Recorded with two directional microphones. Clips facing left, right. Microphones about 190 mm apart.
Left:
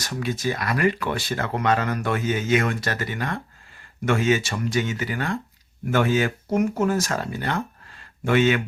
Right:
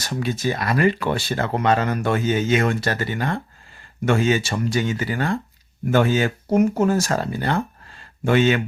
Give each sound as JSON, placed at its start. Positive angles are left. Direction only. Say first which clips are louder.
{"t": 0.0, "sound": "speech", "louder": "right 2 dB", "side_deg": -30}